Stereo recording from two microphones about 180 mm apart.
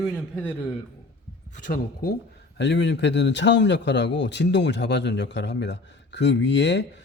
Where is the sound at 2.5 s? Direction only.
75° left (ahead or behind).